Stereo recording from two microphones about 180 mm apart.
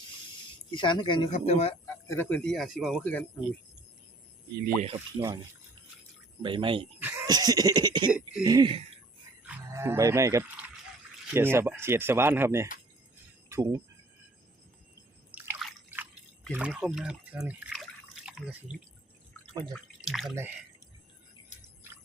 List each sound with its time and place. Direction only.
0.7 s speech: 25° left (ahead or behind)
1.3 s speech: 40° left (ahead or behind)
2.0 s speech: 10° left (ahead or behind)
4.9 s speech: 15° right (ahead or behind)
6.4 s a sound: 25° right (ahead or behind)
7.0 s a sound: 10° right (ahead or behind)
7.3 s a sound: 20° right (ahead or behind)
8.1 s speech: 5° right (ahead or behind)
8.4 s a sound: 25° right (ahead or behind)
9.6 s speech: 15° right (ahead or behind)
15.4 s drip: 5° right (ahead or behind)
16.5 s speech: 5° right (ahead or behind)
20.3 s speech: 10° right (ahead or behind)